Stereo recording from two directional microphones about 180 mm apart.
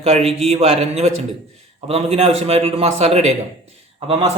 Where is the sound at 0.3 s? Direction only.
35° right (ahead or behind).